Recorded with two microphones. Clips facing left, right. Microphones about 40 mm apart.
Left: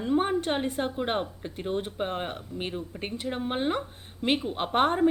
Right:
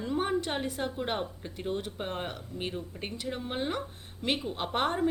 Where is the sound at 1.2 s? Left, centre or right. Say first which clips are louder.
Left 2 dB; centre.